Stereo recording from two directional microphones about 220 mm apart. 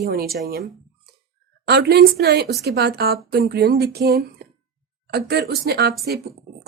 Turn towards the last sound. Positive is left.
turn(degrees=-45)  # may be behind; listen again after turning